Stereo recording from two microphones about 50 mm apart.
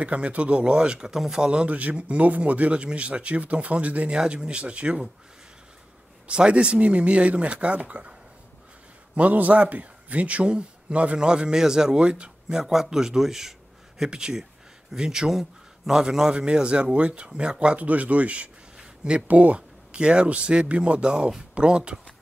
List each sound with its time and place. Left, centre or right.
0.0 s speech: right
6.2 s speech: right
9.1 s speech: right